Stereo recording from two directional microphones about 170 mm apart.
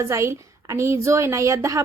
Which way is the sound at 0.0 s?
15° right (ahead or behind).